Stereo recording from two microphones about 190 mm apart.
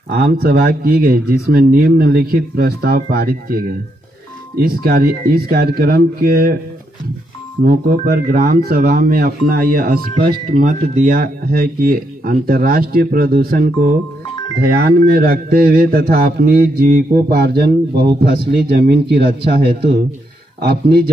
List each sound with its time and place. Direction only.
0.1 s speech: 55° right (ahead or behind)
7.6 s speech: 50° right (ahead or behind)